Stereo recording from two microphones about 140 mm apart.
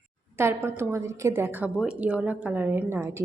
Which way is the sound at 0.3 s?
20° right (ahead or behind).